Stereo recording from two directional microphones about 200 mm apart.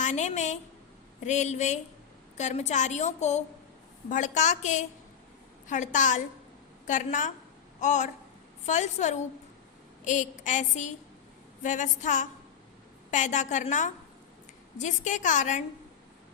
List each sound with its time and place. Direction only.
0.0 s a woman's voice: 35° left (ahead or behind)